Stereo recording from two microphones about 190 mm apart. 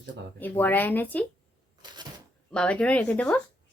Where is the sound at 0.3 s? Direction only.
10° left (ahead or behind).